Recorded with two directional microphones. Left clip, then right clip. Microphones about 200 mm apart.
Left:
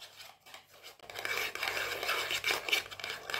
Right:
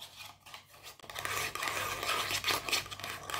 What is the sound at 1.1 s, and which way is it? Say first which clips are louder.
Dishes: left 1 dB; 10° right (ahead or behind).